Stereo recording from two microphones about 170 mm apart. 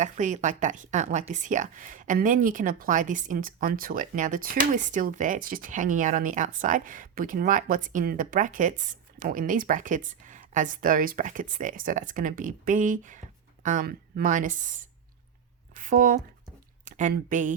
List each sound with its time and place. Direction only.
0.0 s speech: 45° right (ahead or behind)
15.8 s speech: 50° right (ahead or behind)